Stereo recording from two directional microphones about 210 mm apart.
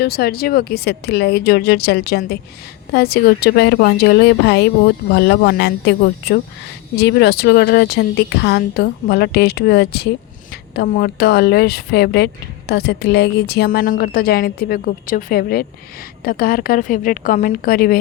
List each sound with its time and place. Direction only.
0.0 s a woman's voice: 45° left (ahead or behind)